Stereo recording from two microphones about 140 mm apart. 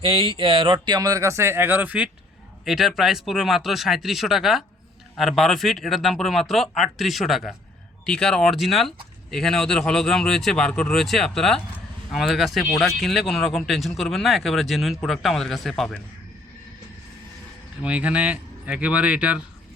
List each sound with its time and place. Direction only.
0.0 s speech: 40° right (ahead or behind); by 16.0 s centre (ahead or behind)
17.8 s speech: 10° right (ahead or behind)